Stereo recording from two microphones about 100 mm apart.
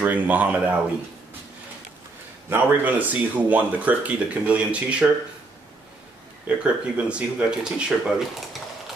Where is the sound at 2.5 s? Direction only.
20° right (ahead or behind).